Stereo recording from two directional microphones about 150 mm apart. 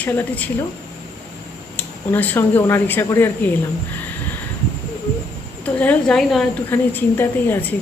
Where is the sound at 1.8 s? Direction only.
10° left (ahead or behind).